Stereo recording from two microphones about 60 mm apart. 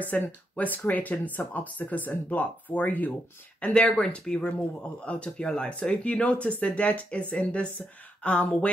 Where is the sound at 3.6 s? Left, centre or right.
Centre.